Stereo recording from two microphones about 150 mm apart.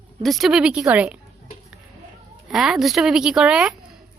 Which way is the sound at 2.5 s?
Centre (ahead or behind).